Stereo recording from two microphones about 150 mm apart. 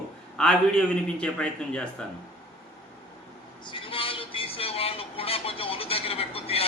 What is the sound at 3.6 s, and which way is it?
Speech, 35° left (ahead or behind).